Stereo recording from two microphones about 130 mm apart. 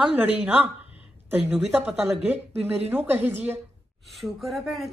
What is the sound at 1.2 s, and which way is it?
Speech, 15° right (ahead or behind).